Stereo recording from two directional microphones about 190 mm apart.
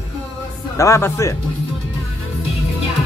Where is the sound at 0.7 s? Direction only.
15° left (ahead or behind).